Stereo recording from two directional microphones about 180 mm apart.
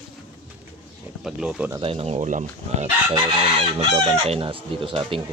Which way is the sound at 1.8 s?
35° right (ahead or behind).